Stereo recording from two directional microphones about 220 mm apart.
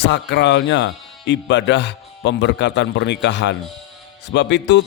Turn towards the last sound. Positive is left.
turn(degrees=55)  # may be behind; listen again after turning